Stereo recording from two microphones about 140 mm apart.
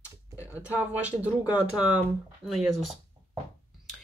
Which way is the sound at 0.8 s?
10° right (ahead or behind).